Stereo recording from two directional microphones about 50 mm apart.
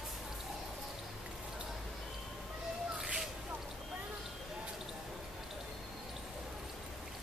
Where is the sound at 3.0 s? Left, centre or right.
Centre.